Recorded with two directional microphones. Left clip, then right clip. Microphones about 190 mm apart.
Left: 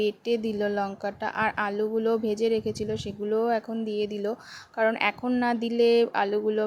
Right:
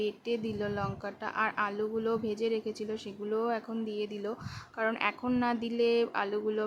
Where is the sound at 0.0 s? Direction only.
20° left (ahead or behind).